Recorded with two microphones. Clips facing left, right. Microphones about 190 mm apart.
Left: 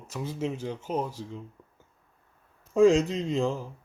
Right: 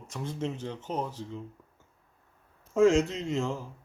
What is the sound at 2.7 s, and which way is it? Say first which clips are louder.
Speech: left 2 dB; 15° left (ahead or behind).